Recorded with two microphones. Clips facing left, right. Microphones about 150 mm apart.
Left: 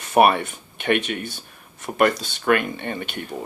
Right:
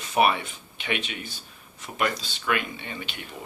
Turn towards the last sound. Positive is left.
turn(degrees=50)  # may be behind; listen again after turning